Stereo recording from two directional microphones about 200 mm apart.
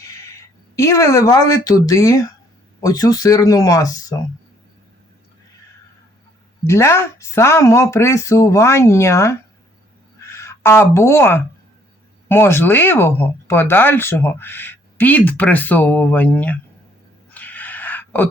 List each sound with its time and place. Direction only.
0.8 s speech: 15° left (ahead or behind)
6.7 s speech: 15° left (ahead or behind)
17.3 s a sound: 10° left (ahead or behind)